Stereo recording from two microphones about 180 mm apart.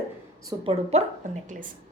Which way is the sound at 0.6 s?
40° right (ahead or behind).